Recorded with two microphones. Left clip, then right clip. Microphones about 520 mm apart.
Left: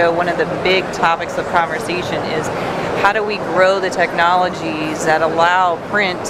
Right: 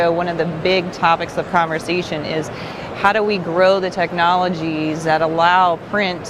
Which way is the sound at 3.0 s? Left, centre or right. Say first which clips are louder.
Right 1 dB; right.